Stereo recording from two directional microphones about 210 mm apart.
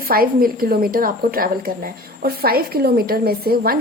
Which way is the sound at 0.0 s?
45° right (ahead or behind).